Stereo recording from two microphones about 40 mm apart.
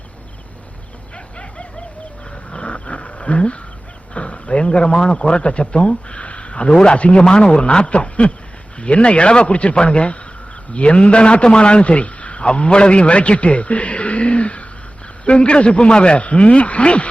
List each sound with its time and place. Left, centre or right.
2.5 s wild animals: left
4.1 s a man's voice: left